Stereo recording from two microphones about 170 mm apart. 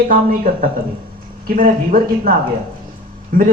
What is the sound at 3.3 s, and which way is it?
Speech, 55° right (ahead or behind).